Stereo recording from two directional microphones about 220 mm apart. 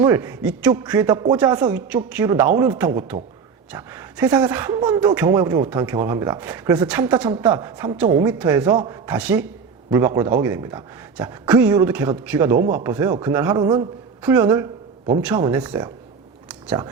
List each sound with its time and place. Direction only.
0.0 s a man's voice: 10° right (ahead or behind)
9.0 s speech: 5° right (ahead or behind)
14.2 s speech: 10° right (ahead or behind)
16.5 s a sound: 5° right (ahead or behind)